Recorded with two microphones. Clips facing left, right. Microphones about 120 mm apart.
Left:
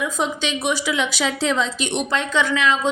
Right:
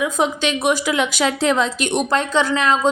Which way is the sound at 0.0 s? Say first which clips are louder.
Right 4 dB; 55° right (ahead or behind).